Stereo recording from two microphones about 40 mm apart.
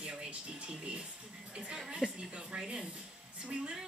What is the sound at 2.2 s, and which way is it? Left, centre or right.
A woman's voice, right.